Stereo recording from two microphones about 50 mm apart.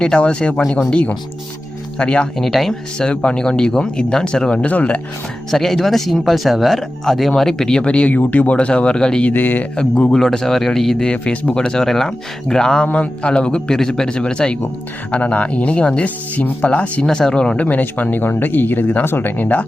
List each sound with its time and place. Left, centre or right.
0.2 s speech: left
2.4 s speech: centre
3.0 s speech: left
4.7 s speech: left
5.5 s speech: centre
9.2 s speech: left
9.7 s speech: centre
11.1 s speech: left
12.8 s speech: left
17.1 s speech: centre
17.6 s speech: left